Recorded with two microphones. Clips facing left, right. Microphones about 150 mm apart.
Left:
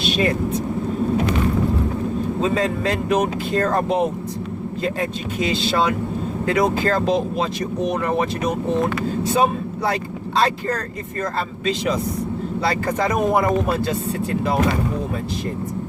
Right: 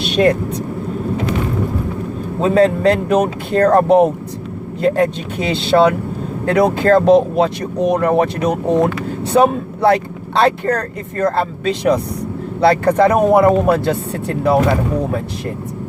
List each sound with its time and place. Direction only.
2.4 s speech: 60° right (ahead or behind)